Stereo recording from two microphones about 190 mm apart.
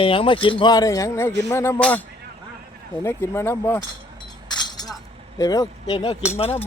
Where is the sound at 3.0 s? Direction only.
15° left (ahead or behind).